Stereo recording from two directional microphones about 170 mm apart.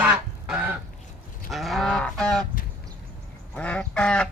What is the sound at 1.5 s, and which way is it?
Livestock, centre (ahead or behind).